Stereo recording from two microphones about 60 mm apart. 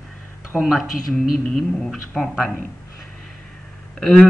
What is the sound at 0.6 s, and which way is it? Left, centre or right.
Speech, centre.